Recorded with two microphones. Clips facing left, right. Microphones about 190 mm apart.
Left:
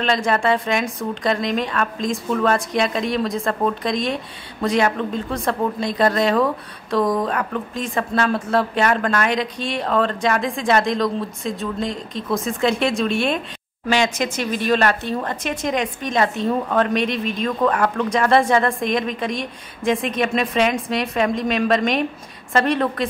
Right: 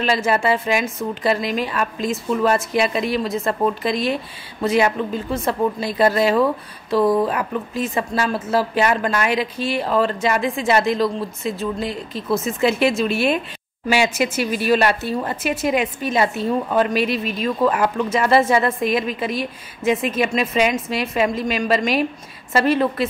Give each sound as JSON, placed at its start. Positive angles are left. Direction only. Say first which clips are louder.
{"t": 0.0, "sound": "a woman's voice", "louder": "even", "side_deg": -5}